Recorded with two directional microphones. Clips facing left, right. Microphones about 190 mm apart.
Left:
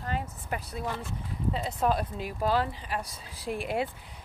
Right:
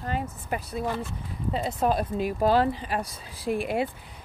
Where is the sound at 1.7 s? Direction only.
35° right (ahead or behind).